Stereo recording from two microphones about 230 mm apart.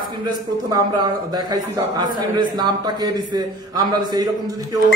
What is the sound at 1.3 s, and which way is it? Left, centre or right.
A man's voice, centre.